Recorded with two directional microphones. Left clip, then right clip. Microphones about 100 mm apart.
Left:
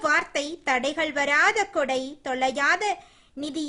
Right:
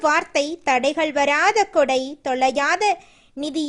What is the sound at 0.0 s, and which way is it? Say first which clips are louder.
A woman's voice: right 5 dB; 45° right (ahead or behind).